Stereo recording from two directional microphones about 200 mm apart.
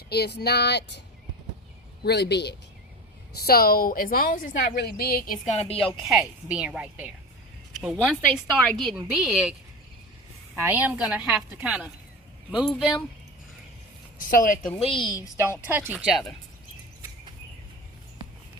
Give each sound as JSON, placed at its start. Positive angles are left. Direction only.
{"t": 0.1, "sound": "speech", "side_deg": 55}
{"t": 2.0, "sound": "a woman's voice", "side_deg": 55}
{"t": 6.0, "sound": "a woman's voice", "side_deg": 0}
{"t": 14.2, "sound": "a woman's voice", "side_deg": 45}
{"t": 14.8, "sound": "a woman's voice", "side_deg": 25}
{"t": 15.7, "sound": "a woman's voice", "side_deg": -10}